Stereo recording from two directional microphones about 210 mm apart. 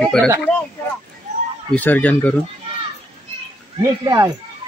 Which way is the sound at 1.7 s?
10° left (ahead or behind).